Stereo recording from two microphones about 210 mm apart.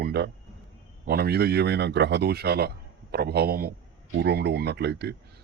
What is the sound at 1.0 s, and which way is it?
Speech, 50° right (ahead or behind).